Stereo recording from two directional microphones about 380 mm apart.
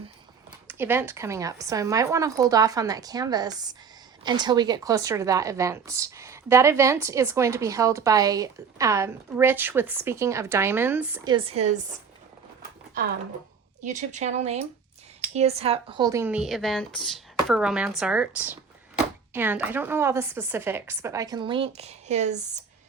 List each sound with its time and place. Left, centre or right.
0.7 s a woman's voice: centre
13.8 s a woman's voice: centre